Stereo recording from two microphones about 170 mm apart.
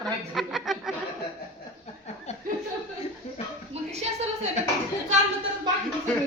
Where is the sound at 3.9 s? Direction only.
40° right (ahead or behind).